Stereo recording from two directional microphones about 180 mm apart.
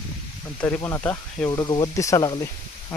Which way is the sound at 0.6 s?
10° left (ahead or behind).